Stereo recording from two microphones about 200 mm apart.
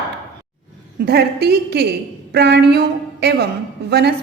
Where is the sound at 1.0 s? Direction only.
55° right (ahead or behind).